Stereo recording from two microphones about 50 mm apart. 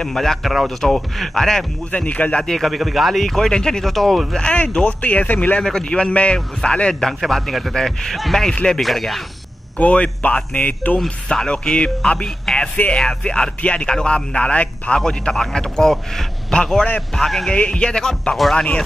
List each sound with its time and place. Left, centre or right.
0.0 s a man's voice: centre
1.9 s speech: left
2.4 s a man's voice: centre
4.4 s speech: centre
5.6 s a man's voice: centre
5.9 s a man's voice: left
7.1 s a man's voice: centre
8.8 s speech: centre
9.8 s speech: left
11.4 s speech: centre
12.7 s speech: left
13.0 s speech: centre
15.0 s a man's voice: centre
17.5 s a man's voice: centre